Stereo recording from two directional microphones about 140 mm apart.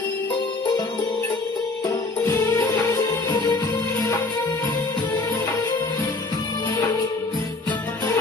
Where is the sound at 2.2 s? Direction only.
15° left (ahead or behind).